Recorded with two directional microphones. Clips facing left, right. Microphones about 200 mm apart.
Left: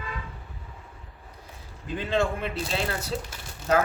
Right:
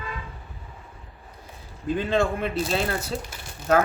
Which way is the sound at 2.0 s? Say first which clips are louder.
Right 2 dB; 50° right (ahead or behind).